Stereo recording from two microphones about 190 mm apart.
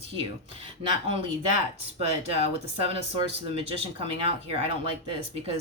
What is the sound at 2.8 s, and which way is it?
Speech, 30° right (ahead or behind).